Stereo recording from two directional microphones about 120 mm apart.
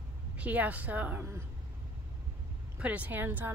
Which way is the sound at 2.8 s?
10° right (ahead or behind).